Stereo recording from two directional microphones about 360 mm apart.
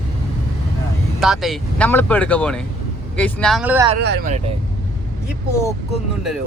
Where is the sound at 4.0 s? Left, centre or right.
Right.